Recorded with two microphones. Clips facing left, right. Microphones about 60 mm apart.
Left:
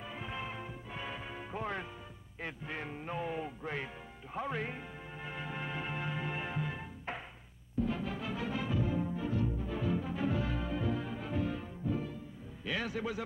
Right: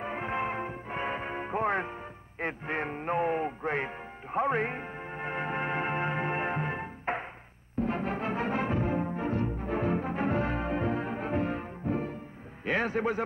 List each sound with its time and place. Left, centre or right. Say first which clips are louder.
0.0 s music: right 10 dB; right
12.6 s a man's voice: right 8 dB; right